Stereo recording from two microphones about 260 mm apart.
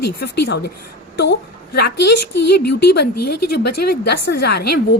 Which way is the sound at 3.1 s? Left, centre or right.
Left.